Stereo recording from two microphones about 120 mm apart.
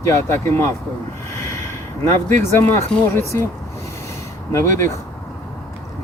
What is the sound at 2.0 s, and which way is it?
Speech, 20° left (ahead or behind).